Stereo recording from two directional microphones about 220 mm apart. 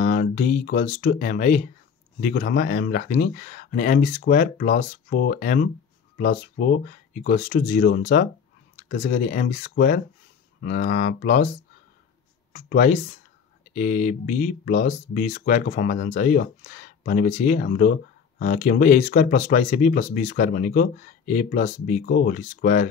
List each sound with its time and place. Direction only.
0.0 s a sound: 40° left (ahead or behind)
1.0 s speech: 40° left (ahead or behind)
12.5 s speech: 40° left (ahead or behind)